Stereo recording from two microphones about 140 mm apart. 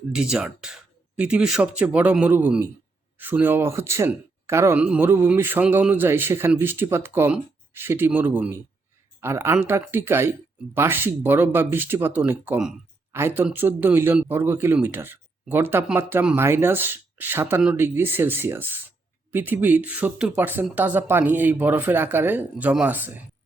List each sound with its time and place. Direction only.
0.1 s a woman's voice: 5° right (ahead or behind)